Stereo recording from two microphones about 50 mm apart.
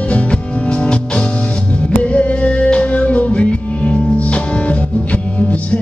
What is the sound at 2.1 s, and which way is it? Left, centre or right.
Music, left.